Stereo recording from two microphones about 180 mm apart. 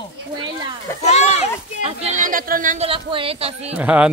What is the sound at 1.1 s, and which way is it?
Speech, 40° left (ahead or behind).